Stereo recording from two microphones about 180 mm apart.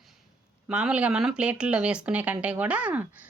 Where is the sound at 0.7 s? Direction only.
5° right (ahead or behind).